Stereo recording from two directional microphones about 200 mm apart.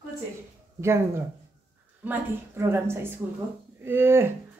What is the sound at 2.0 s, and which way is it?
A woman's voice, 10° right (ahead or behind).